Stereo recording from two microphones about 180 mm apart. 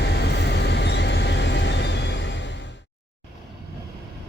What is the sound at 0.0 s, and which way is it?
Train, 65° left (ahead or behind).